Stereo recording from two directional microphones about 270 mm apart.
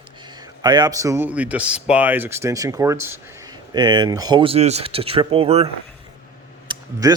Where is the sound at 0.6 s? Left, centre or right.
Centre.